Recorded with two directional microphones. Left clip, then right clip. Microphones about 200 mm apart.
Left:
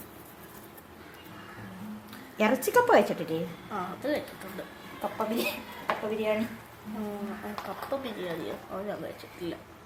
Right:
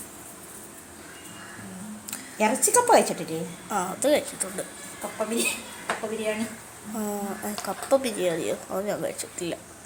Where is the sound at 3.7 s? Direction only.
30° right (ahead or behind).